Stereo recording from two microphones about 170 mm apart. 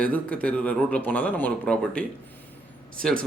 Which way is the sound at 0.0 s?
10° left (ahead or behind).